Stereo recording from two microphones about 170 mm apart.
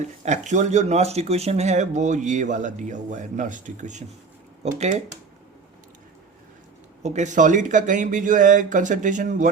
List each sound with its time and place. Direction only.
0.0 s speech: 45° right (ahead or behind)
7.0 s speech: 45° right (ahead or behind)